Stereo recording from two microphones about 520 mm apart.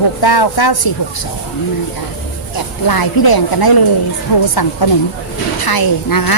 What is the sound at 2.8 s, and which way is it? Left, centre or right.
A woman's voice, left.